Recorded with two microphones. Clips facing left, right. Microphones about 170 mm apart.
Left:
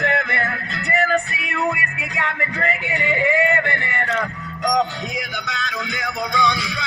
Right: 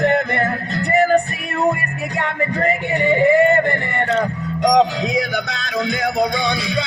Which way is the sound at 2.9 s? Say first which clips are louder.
Right 7 dB; 40° right (ahead or behind).